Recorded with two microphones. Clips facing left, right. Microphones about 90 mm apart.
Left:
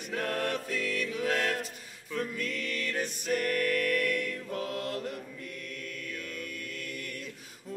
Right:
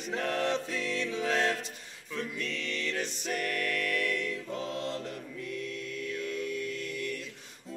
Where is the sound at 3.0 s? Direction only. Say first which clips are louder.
Left 3 dB; centre (ahead or behind).